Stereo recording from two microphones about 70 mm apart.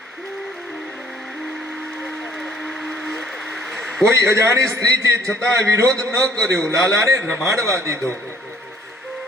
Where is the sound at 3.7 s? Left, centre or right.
Centre.